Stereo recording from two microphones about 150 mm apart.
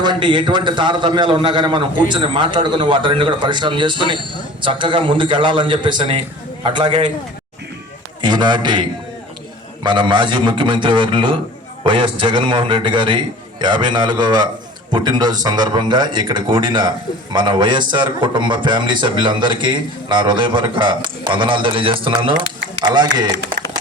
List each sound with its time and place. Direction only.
0.0 s speech: 30° right (ahead or behind)
8.2 s speech: 30° right (ahead or behind)